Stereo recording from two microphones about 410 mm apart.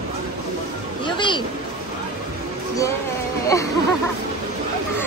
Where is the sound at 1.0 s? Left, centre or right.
Centre.